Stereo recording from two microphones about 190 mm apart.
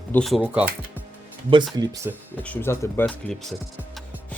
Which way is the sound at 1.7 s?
20° right (ahead or behind).